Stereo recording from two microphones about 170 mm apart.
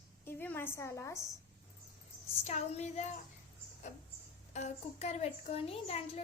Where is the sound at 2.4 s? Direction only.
40° left (ahead or behind).